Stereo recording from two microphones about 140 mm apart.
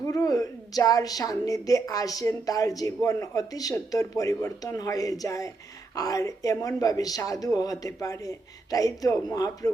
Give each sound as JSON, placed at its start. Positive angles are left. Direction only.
{"t": 0.1, "sound": "a woman's voice", "side_deg": 25}